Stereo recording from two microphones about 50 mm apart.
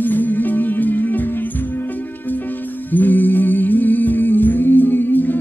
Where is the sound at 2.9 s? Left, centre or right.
Left.